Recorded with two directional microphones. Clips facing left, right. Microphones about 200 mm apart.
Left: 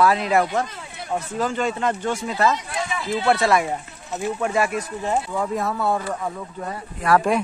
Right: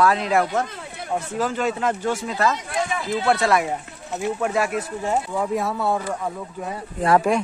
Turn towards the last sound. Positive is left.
turn(degrees=0)  # may be behind; listen again after turning